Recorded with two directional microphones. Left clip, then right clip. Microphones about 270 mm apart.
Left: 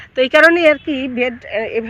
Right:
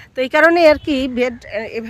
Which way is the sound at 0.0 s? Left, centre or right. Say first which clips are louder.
Left 3 dB; centre.